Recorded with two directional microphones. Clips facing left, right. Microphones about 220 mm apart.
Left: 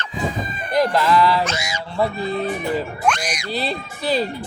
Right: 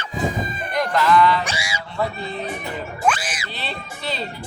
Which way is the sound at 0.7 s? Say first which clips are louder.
Left 2 dB; 35° left (ahead or behind).